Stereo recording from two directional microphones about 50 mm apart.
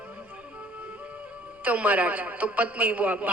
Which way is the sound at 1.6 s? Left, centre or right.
Right.